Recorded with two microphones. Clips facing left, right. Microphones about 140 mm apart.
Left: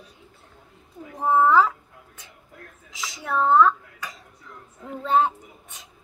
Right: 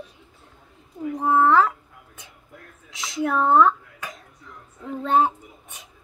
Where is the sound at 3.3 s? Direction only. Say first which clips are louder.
Even; 10° right (ahead or behind).